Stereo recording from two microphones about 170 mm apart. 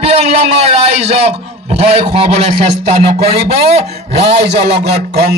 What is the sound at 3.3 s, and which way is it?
Speech, 35° right (ahead or behind).